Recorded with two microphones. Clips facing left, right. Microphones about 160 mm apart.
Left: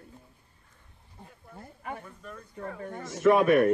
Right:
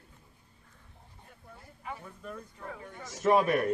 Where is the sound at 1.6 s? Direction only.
55° left (ahead or behind).